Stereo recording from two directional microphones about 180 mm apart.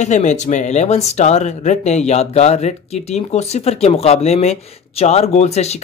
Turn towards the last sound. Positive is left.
turn(degrees=35)  # may be behind; listen again after turning